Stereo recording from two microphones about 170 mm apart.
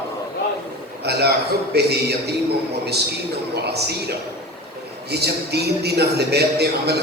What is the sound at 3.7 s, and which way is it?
A man's voice, 75° right (ahead or behind).